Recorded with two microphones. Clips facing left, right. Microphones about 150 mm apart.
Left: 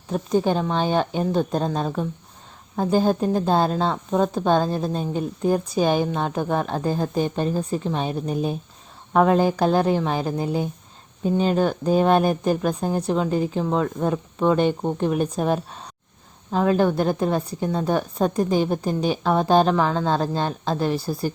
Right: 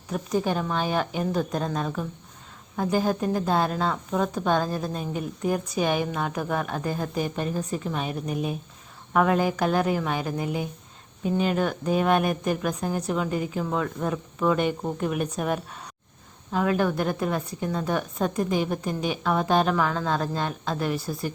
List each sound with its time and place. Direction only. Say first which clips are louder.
0.1 s a woman's voice: left 5 dB; 30° left (ahead or behind)